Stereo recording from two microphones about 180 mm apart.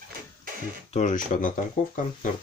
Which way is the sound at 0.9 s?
45° left (ahead or behind).